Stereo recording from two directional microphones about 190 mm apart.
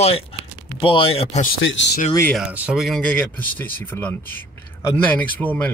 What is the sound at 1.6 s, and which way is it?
Speech, 75° left (ahead or behind).